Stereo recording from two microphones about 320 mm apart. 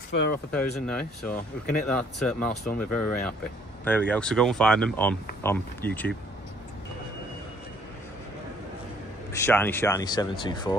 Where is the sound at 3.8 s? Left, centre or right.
Centre.